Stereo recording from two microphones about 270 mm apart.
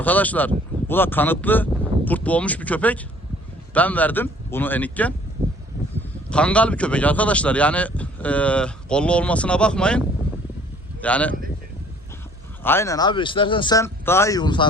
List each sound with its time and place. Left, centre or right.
0.0 s speech: centre
11.0 s speech: centre
12.6 s speech: centre